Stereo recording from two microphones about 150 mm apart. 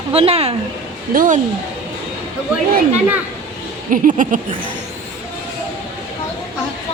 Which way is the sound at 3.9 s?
60° right (ahead or behind).